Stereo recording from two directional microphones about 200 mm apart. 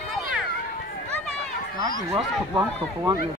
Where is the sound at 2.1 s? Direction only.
15° right (ahead or behind).